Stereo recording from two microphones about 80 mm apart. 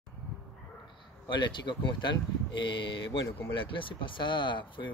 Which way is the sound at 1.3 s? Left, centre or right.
Left.